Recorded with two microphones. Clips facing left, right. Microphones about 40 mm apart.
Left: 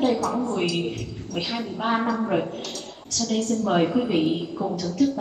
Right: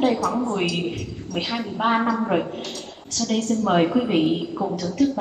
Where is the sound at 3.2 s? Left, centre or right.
Right.